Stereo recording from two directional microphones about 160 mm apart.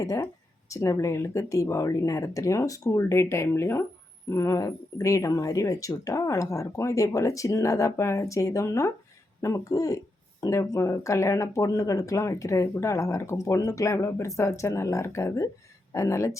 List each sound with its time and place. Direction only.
0.0 s speech: 20° left (ahead or behind)